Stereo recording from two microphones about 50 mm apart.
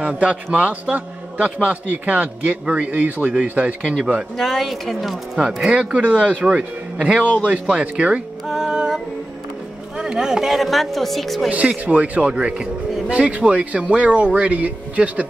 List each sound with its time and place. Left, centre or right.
0.2 s a man's voice: right
4.4 s speech: centre
5.8 s a man's voice: right
8.5 s music: centre
9.9 s speech: centre
11.5 s a man's voice: right